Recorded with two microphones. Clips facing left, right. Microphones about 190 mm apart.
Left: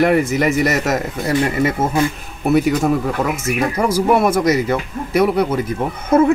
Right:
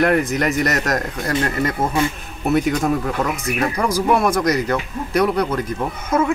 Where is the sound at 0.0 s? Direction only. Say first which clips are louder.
Left 3 dB; 5° left (ahead or behind).